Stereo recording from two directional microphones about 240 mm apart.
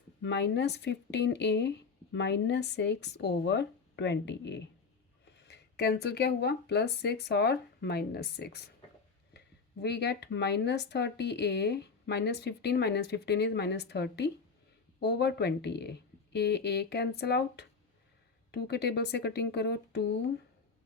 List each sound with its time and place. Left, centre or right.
0.2 s speech: left